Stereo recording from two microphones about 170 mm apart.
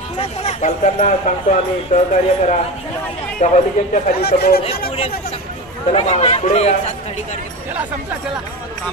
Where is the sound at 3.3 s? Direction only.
45° left (ahead or behind).